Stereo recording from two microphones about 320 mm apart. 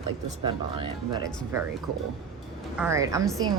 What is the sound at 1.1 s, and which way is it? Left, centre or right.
Speech, centre.